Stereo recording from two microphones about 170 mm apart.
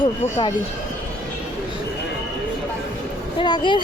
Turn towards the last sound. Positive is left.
turn(degrees=25)  # may be behind; listen again after turning